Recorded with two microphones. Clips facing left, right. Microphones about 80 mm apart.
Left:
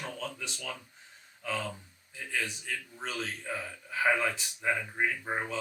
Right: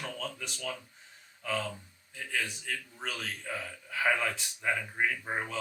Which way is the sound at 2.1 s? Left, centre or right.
Centre.